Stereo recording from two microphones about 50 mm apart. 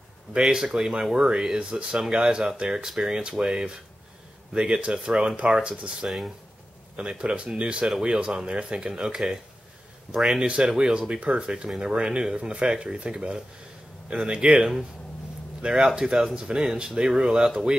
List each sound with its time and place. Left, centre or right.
0.3 s speech: centre
6.0 s speech: centre
7.0 s speech: centre
10.4 s speech: right